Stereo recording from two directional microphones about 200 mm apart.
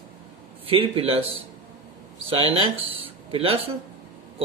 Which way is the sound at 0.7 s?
25° right (ahead or behind).